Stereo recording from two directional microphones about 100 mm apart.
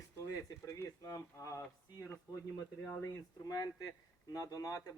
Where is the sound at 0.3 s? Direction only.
30° left (ahead or behind).